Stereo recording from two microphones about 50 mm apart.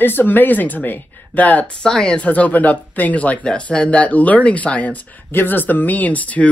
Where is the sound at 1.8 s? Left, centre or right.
Centre.